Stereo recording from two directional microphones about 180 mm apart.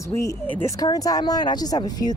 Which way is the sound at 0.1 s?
15° left (ahead or behind).